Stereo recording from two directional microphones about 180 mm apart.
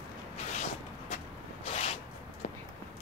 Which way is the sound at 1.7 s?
35° left (ahead or behind).